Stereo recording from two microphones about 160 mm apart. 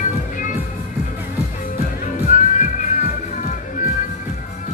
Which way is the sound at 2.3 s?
50° left (ahead or behind).